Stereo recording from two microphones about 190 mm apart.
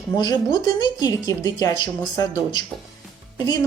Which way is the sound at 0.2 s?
20° left (ahead or behind).